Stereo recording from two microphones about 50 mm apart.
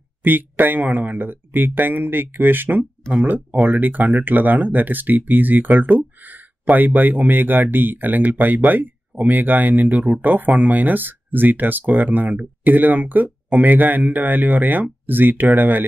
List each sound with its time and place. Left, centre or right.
0.2 s speech: right